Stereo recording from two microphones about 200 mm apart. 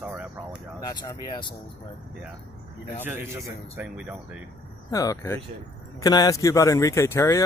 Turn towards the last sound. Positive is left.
turn(degrees=15)  # may be behind; listen again after turning